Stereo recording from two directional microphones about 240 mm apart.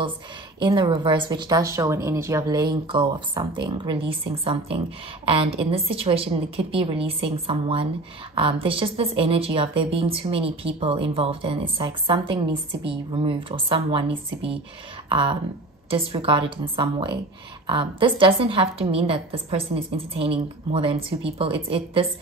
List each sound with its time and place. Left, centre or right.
0.6 s speech: centre